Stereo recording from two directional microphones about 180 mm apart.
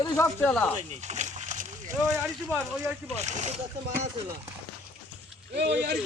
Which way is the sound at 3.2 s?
40° right (ahead or behind).